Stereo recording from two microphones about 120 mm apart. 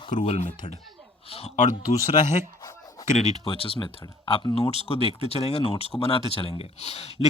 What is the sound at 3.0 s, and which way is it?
Speech, 65° left (ahead or behind).